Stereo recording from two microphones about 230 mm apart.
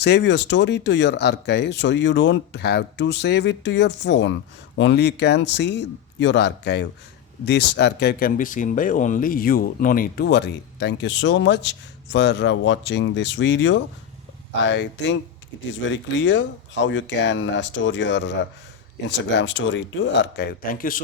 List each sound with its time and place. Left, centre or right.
0.0 s speech: left